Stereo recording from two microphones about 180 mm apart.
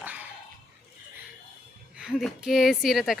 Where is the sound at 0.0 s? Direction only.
10° right (ahead or behind).